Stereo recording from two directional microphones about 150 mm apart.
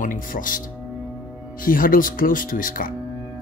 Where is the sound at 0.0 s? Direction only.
65° left (ahead or behind).